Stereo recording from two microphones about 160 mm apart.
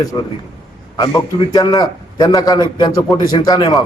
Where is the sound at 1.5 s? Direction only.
25° left (ahead or behind).